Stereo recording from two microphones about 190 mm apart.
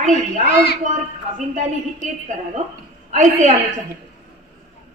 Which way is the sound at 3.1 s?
40° right (ahead or behind).